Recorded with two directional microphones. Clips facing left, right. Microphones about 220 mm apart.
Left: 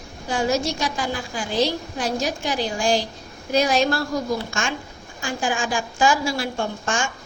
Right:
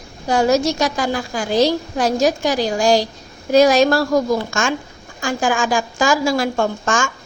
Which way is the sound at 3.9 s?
90° right.